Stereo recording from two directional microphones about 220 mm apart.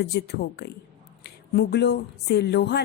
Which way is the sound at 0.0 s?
45° left (ahead or behind).